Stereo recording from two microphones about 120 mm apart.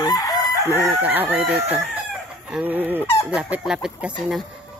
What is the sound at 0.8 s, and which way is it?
Speech, 15° right (ahead or behind).